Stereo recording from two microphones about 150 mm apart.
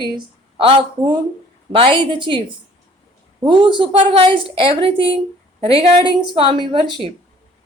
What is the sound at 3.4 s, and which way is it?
A woman's voice, 35° right (ahead or behind).